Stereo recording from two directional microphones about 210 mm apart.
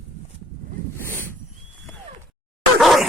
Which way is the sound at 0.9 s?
10° left (ahead or behind).